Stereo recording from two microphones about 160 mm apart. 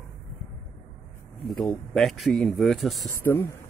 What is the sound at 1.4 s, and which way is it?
Speech, centre (ahead or behind).